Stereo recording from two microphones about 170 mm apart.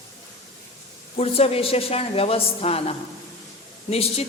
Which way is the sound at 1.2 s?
35° left (ahead or behind).